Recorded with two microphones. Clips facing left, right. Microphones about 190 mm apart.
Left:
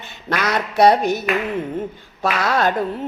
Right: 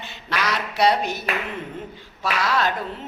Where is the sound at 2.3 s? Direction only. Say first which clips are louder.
Left 3 dB; 50° left (ahead or behind).